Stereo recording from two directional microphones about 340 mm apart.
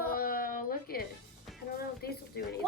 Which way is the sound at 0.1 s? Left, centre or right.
Left.